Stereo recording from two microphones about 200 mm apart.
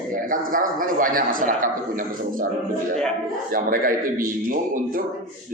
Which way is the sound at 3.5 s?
45° right (ahead or behind).